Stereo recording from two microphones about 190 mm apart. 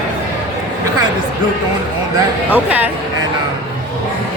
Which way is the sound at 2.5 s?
10° right (ahead or behind).